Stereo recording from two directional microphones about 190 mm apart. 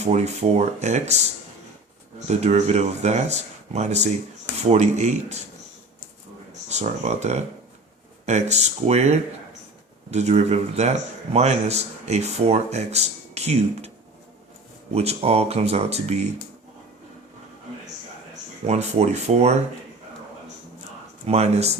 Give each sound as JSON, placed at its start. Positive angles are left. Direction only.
{"t": 0.0, "sound": "speech", "side_deg": -35}
{"t": 6.7, "sound": "speech", "side_deg": -35}
{"t": 14.9, "sound": "speech", "side_deg": -35}
{"t": 18.6, "sound": "speech", "side_deg": -35}
{"t": 21.2, "sound": "speech", "side_deg": -35}